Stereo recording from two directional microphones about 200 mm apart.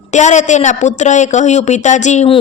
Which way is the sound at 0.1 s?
35° left (ahead or behind).